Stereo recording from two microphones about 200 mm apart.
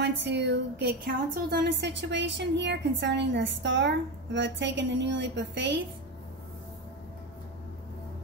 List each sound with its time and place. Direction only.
0.0 s a woman's voice: 60° right (ahead or behind)